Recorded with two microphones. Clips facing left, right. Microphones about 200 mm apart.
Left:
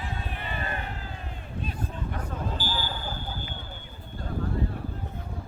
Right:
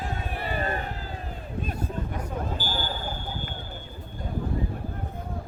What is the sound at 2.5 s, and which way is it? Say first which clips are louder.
Basketball bounce: right 1 dB; 50° right (ahead or behind).